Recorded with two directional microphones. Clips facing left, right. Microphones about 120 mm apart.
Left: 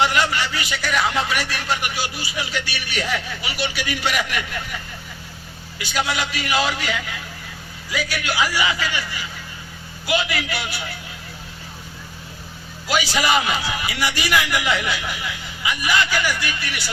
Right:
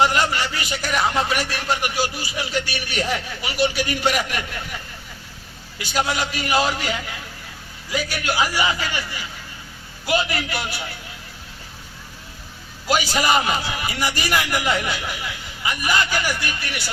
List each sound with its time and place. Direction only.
0.0 s a man's voice: 40° right (ahead or behind)
5.8 s a man's voice: 40° right (ahead or behind)
10.1 s a man's voice: 40° right (ahead or behind)
12.9 s a man's voice: 45° right (ahead or behind)